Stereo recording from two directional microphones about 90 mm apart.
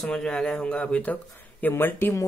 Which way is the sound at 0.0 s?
5° left (ahead or behind).